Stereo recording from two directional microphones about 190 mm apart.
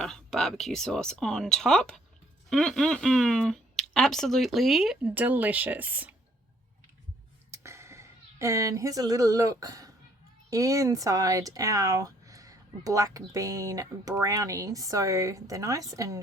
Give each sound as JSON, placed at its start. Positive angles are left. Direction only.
{"t": 0.0, "sound": "speech", "side_deg": 5}
{"t": 7.5, "sound": "a sound", "side_deg": -15}
{"t": 10.5, "sound": "speech", "side_deg": -15}